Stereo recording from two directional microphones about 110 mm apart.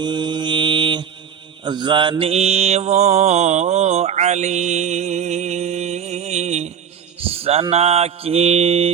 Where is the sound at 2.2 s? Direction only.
70° right (ahead or behind); by 6.7 s 90° right.